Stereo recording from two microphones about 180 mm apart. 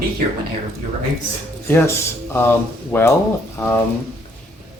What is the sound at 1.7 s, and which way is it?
Speech, 15° left (ahead or behind).